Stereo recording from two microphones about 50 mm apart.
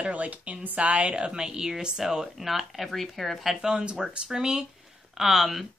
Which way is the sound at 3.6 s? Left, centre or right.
Centre.